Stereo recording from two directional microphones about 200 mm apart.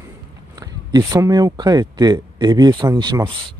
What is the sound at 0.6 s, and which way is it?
Speech, 15° right (ahead or behind).